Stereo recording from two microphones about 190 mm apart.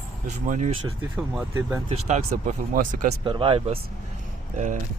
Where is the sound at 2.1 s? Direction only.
40° right (ahead or behind).